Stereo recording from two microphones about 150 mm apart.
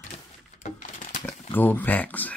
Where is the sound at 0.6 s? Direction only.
55° left (ahead or behind).